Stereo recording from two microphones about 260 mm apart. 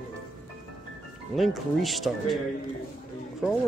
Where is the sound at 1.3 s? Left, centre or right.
Centre.